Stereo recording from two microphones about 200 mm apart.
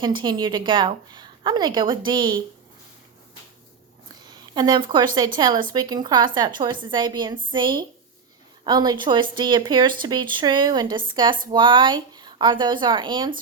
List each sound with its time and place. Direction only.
0.0 s a woman's voice: 25° right (ahead or behind)
4.1 s a woman's voice: 20° right (ahead or behind)